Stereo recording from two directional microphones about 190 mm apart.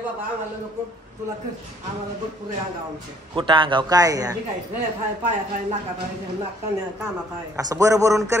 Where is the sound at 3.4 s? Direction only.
25° right (ahead or behind).